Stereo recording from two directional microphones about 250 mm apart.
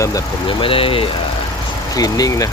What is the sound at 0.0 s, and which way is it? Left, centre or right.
Speech, centre.